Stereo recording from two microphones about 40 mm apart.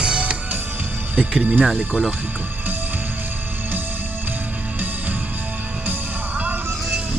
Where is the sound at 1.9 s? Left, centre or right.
Right.